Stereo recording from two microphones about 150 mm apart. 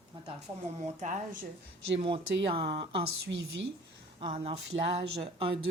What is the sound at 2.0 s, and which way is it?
Speech, 35° right (ahead or behind).